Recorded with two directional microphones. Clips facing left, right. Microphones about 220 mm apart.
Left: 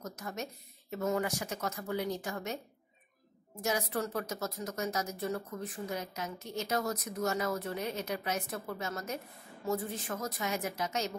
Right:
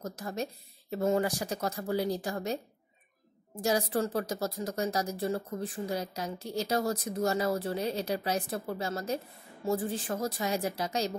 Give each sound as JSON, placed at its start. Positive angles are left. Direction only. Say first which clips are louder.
{"t": 0.0, "sound": "speech", "louder": "right 5 dB", "side_deg": -30}
{"t": 3.6, "sound": "speech", "louder": "right 5 dB", "side_deg": -30}